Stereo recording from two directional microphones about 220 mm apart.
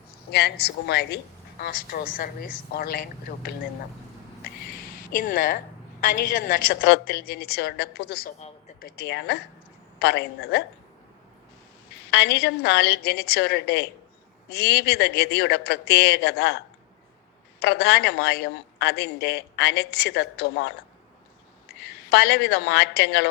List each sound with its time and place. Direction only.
0.1 s speech: 45° left (ahead or behind)
5.1 s speech: 40° left (ahead or behind)
12.1 s speech: 50° left (ahead or behind)
17.6 s speech: 50° left (ahead or behind)
22.1 s speech: 50° left (ahead or behind)